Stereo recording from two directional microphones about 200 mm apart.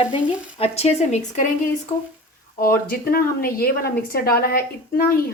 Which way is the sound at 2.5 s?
45° left (ahead or behind).